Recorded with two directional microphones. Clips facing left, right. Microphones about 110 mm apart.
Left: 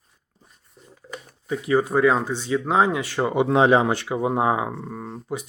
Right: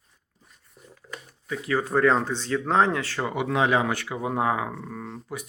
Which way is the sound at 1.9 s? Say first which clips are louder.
Left 2 dB; 10° left (ahead or behind).